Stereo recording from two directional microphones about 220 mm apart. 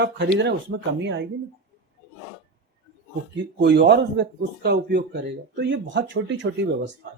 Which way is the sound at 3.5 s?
50° right (ahead or behind).